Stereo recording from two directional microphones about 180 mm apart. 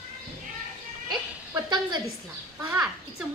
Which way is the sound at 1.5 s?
25° right (ahead or behind).